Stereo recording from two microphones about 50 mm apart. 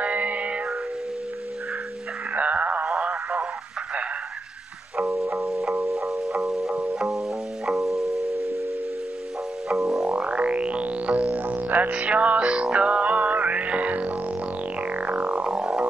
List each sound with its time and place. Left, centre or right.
0.0 s music: right
2.3 s a sound: right
3.0 s radio: centre
4.9 s music: centre
9.7 s music: centre
10.0 s music: right
11.9 s music: right
15.5 s music: centre